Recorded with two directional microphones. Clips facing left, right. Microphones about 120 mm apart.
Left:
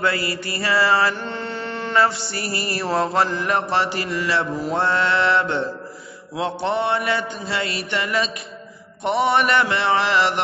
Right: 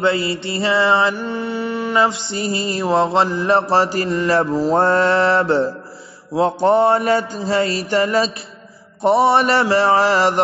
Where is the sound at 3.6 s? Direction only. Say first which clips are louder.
Right 5 dB; 35° right (ahead or behind).